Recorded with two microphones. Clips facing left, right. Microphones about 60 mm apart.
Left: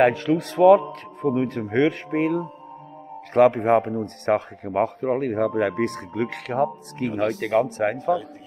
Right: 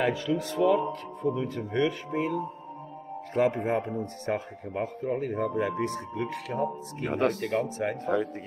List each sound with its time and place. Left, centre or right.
0.0 s speech: left
3.3 s speech: left
7.1 s speech: right
7.3 s speech: left